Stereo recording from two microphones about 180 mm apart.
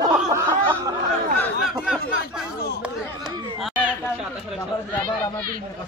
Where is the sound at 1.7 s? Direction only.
Centre (ahead or behind).